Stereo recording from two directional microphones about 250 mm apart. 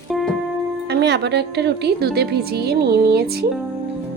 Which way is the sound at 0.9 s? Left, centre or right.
Right.